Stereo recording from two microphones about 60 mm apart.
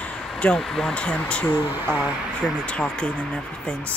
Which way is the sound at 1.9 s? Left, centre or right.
Right.